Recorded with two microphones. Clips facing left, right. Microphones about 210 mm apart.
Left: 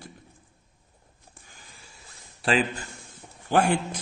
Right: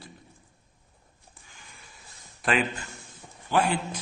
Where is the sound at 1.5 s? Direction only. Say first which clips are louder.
Right 1 dB; 35° left (ahead or behind).